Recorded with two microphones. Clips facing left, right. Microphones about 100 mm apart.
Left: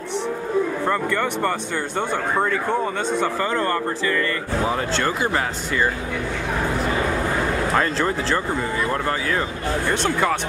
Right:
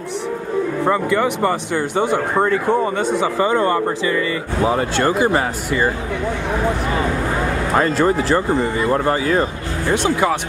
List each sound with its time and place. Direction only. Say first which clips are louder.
0.8 s speech: right 5 dB; 5° right (ahead or behind)
7.7 s speech: right 9 dB; 10° right (ahead or behind)
8.9 s speech: right 6 dB; 20° right (ahead or behind)
9.8 s speech: right 5 dB; 10° right (ahead or behind)